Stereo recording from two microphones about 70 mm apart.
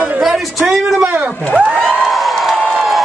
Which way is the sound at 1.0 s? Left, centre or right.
Centre.